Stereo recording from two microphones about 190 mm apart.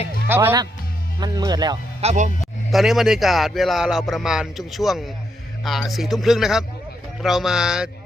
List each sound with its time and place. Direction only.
0.3 s speech: 10° right (ahead or behind)
2.0 s speech: 35° right (ahead or behind)
2.7 s speech: centre (ahead or behind)